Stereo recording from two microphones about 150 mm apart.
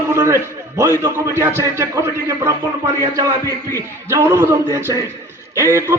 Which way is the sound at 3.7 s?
20° right (ahead or behind).